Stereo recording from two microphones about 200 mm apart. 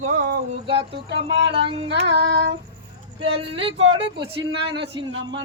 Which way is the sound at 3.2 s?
25° right (ahead or behind).